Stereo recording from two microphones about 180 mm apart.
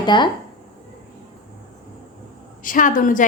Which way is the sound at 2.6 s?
50° left (ahead or behind).